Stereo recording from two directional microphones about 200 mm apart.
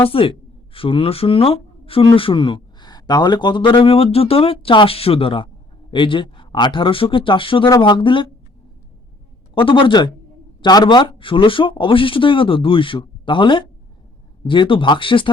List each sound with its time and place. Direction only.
0.0 s speech: 25° left (ahead or behind)
9.6 s speech: 25° left (ahead or behind)